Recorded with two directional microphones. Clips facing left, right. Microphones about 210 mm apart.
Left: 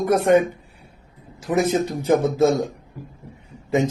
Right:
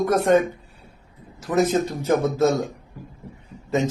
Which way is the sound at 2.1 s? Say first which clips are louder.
Left 2 dB; 15° left (ahead or behind).